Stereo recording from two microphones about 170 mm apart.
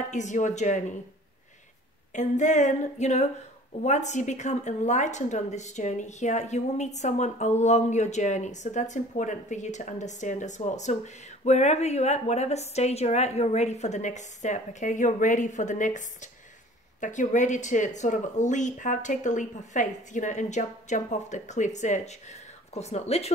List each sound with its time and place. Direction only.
0.1 s a woman's voice: 45° left (ahead or behind)
2.1 s a woman's voice: 45° left (ahead or behind)